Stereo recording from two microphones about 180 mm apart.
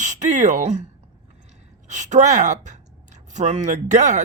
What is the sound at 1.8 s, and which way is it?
Speech, 40° right (ahead or behind).